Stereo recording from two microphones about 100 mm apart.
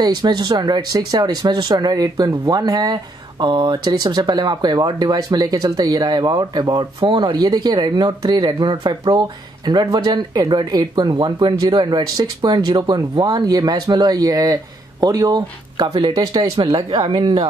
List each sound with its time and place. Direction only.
0.0 s speech: 40° right (ahead or behind)